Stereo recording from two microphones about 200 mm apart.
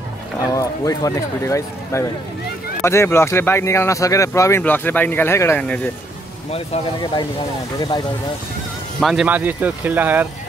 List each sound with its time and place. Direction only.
0.6 s speech: 15° left (ahead or behind)
6.5 s speech: 25° left (ahead or behind)
9.0 s speech: 5° right (ahead or behind)